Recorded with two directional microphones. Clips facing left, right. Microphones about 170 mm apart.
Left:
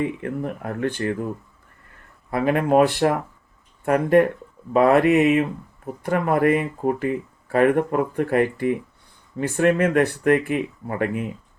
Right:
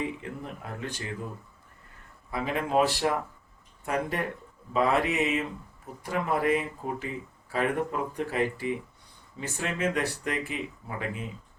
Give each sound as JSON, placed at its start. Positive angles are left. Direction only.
{"t": 0.0, "sound": "speech", "side_deg": 60}
{"t": 2.3, "sound": "speech", "side_deg": 60}